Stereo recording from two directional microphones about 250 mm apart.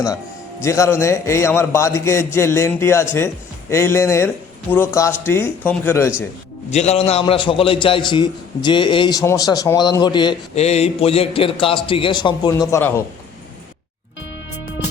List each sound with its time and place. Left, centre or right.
0.6 s a man's voice: centre
6.7 s a man's voice: left